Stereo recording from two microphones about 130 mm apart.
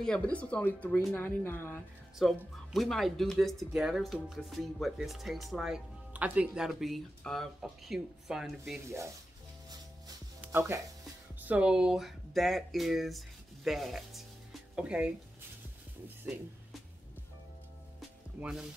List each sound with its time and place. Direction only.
0.0 s speech: 10° left (ahead or behind)
2.1 s speech: centre (ahead or behind)
8.8 s speech: 20° right (ahead or behind)
10.4 s speech: 20° right (ahead or behind)
11.4 s speech: 10° right (ahead or behind)
18.4 s speech: 5° right (ahead or behind)